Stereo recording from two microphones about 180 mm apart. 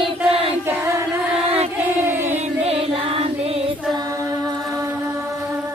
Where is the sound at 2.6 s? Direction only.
30° right (ahead or behind).